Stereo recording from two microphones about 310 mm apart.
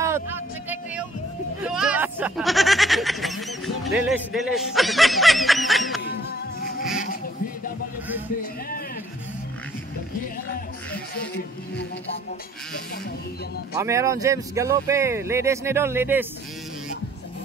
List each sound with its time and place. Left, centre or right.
1.6 s a sound: centre
11.1 s speech: left
13.7 s speech: centre